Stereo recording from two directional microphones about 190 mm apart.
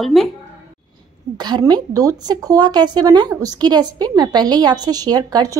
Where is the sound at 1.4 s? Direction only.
20° right (ahead or behind).